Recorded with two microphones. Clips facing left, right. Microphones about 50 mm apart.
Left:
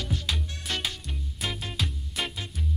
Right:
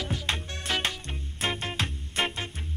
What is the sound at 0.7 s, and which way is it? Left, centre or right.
Music, centre.